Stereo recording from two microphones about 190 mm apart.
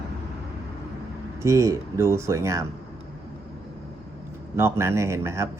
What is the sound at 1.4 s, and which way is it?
Speech, 15° right (ahead or behind).